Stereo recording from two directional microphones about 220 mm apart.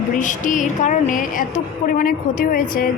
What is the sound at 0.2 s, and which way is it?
A woman's voice, 35° left (ahead or behind).